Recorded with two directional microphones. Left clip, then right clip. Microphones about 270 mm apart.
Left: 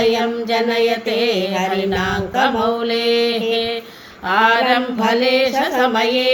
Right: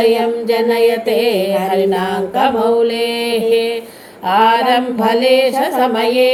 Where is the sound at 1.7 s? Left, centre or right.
Centre.